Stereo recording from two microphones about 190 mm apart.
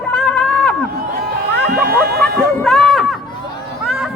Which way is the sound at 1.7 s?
55° right (ahead or behind).